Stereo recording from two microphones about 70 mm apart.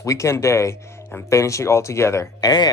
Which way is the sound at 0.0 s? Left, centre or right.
Left.